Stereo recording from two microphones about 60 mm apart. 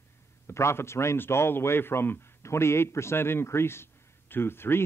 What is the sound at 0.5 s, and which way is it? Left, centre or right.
Speech, left.